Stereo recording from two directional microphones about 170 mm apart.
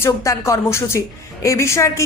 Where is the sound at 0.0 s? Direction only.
20° left (ahead or behind).